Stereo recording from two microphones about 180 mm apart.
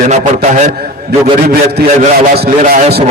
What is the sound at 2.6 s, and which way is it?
Speech, 45° right (ahead or behind).